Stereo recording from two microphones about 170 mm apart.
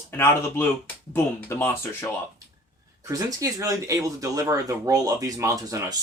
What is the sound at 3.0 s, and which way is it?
Speech, 20° right (ahead or behind).